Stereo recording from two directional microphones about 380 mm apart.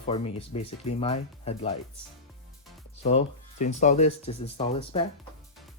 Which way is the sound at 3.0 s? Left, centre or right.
Centre.